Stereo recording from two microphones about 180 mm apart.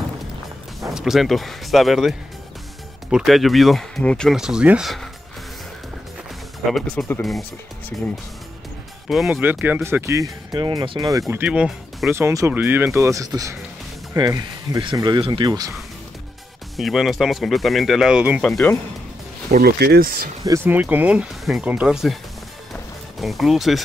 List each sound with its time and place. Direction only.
0.7 s speech: centre (ahead or behind)
6.7 s speech: 5° left (ahead or behind)
9.1 s speech: 5° right (ahead or behind); by 15.7 s 25° right (ahead or behind)
16.7 s speech: centre (ahead or behind)
19.5 s speech: 60° right (ahead or behind)
20.4 s speech: 15° right (ahead or behind)
22.7 s music: centre (ahead or behind)